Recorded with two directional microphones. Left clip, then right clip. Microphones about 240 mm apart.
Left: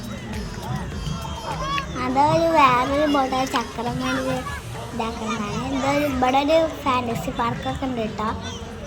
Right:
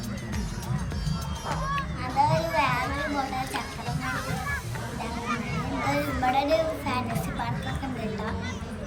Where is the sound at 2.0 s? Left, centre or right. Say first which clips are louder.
Left 7 dB; centre.